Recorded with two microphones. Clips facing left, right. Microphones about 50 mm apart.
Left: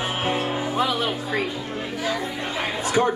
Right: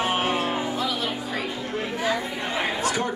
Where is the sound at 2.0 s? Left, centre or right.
Centre.